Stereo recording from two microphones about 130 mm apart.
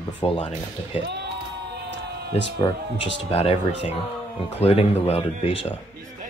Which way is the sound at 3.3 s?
50° left (ahead or behind).